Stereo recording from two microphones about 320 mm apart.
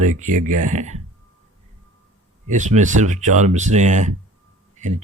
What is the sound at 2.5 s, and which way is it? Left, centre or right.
Speech, right.